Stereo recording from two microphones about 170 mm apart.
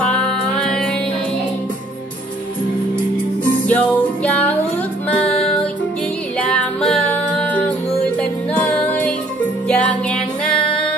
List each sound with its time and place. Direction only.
0.0 s music: 5° left (ahead or behind)
3.6 s music: 10° left (ahead or behind)